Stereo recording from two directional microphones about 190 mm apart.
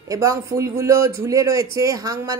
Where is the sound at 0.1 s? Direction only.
20° right (ahead or behind).